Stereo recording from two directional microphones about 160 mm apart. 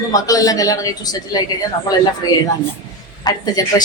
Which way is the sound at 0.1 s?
20° left (ahead or behind).